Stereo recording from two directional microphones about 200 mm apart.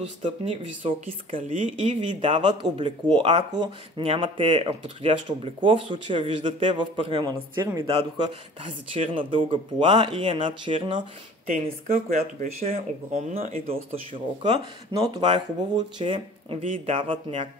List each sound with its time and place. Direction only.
0.2 s speech: 30° right (ahead or behind)
2.0 s speech: 25° right (ahead or behind)
7.8 s speech: 30° right (ahead or behind)